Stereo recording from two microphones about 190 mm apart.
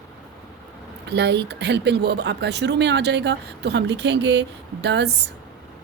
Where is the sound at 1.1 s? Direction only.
65° right (ahead or behind).